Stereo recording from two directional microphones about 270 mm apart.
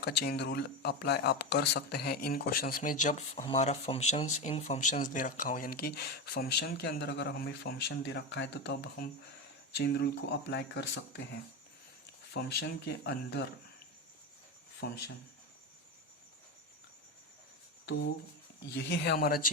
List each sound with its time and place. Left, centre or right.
0.0 s speech: left
12.5 s speech: left
14.8 s speech: left
18.7 s speech: left